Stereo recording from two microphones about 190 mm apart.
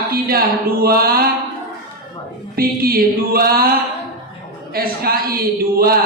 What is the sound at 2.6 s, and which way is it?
Speech, 50° right (ahead or behind).